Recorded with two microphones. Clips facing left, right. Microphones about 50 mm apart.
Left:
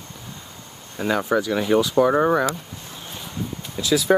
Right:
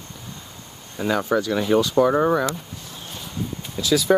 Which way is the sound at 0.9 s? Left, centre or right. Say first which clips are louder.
Even; centre.